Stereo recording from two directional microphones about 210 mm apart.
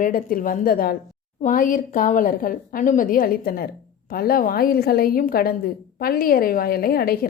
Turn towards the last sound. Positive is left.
turn(degrees=45)  # may be behind; listen again after turning